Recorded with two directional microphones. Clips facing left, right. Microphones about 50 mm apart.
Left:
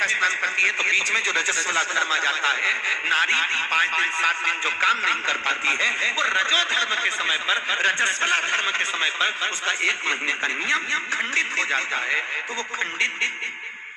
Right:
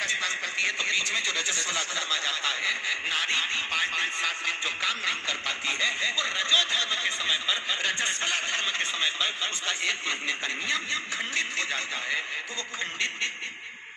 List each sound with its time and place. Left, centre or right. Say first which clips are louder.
0.0 s a man's voice: left 8 dB; left